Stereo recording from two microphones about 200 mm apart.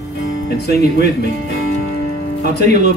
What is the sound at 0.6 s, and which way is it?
Speech, 50° left (ahead or behind).